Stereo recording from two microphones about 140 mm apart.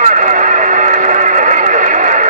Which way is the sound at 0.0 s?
65° right (ahead or behind).